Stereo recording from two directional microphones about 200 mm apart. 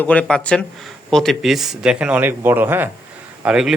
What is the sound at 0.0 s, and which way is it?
Speech, 5° left (ahead or behind).